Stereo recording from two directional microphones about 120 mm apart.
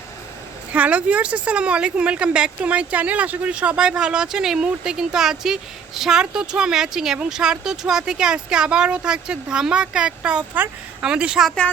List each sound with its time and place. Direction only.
0.7 s speech: 10° right (ahead or behind)